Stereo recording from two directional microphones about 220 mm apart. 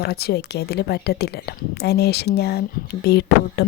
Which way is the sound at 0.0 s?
45° left (ahead or behind).